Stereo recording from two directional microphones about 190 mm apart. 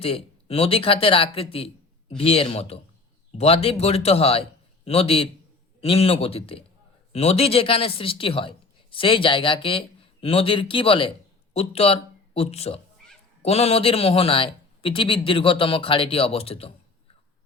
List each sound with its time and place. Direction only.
0.0 s a man's voice: 30° left (ahead or behind)